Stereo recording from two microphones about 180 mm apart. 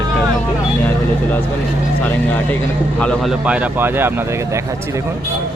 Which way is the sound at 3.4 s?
5° right (ahead or behind).